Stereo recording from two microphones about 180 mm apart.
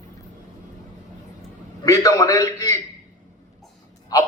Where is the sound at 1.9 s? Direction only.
20° left (ahead or behind).